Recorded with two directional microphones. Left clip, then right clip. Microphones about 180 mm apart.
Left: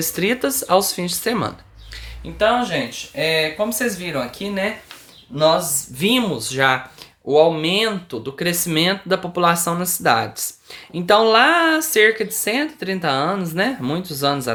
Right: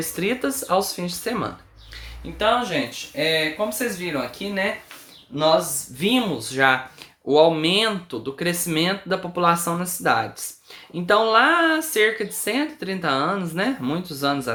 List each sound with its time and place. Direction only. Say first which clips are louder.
0.0 s speech: left 4 dB; 30° left (ahead or behind)
2.4 s speech: left 3 dB; 20° left (ahead or behind)
7.3 s speech: left 2 dB; 5° left (ahead or behind); by 14.5 s 25° left (ahead or behind)